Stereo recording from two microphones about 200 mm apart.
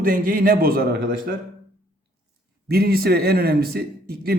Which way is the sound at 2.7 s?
50° right (ahead or behind).